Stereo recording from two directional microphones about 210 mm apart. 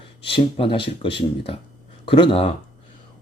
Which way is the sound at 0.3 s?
25° left (ahead or behind).